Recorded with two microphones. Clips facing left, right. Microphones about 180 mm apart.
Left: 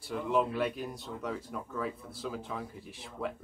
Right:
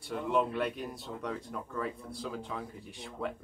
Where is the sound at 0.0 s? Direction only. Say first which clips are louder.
Even; centre (ahead or behind).